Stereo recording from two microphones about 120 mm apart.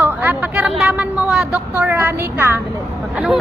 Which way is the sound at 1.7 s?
20° right (ahead or behind).